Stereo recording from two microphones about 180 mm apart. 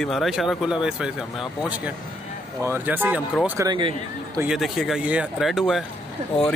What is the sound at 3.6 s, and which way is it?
Speech, 25° right (ahead or behind).